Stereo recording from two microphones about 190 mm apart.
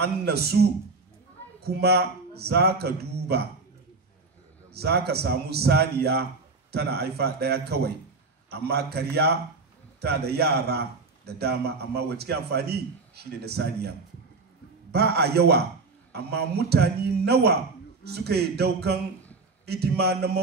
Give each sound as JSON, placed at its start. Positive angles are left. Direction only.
{"t": 0.0, "sound": "a man's voice", "side_deg": -60}
{"t": 4.7, "sound": "a man's voice", "side_deg": -60}
{"t": 14.9, "sound": "a man's voice", "side_deg": -60}